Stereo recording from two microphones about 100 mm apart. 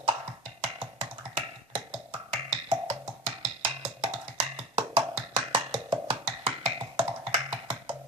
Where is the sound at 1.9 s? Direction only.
80° right.